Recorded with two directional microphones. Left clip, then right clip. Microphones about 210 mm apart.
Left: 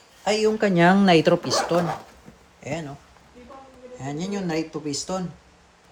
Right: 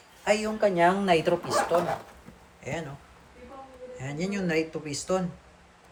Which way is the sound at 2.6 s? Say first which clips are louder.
Left 3 dB; 30° left (ahead or behind).